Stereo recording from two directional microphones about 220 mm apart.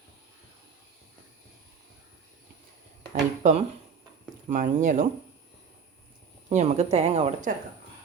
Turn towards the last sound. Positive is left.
turn(degrees=-30)  # may be behind; listen again after turning